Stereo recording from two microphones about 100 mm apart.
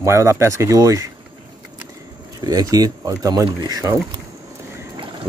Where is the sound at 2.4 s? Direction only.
35° right (ahead or behind).